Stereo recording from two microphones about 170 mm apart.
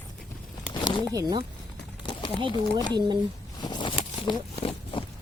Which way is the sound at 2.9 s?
25° right (ahead or behind).